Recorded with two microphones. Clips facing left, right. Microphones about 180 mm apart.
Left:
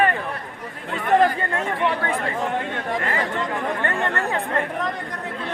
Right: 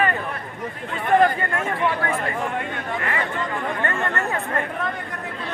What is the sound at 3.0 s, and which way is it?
Speech, 40° left (ahead or behind).